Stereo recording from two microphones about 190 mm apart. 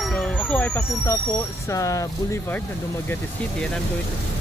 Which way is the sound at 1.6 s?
15° left (ahead or behind).